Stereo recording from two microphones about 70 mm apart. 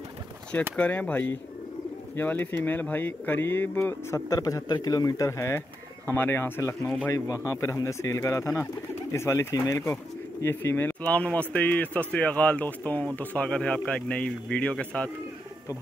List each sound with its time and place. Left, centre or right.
0.7 s a man's voice: centre
4.1 s speech: left
6.0 s speech: left
7.1 s speech: left
10.4 s a man's voice: left; by 15.0 s centre